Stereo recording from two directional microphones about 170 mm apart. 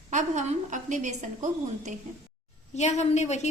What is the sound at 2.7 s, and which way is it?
Speech, 40° left (ahead or behind).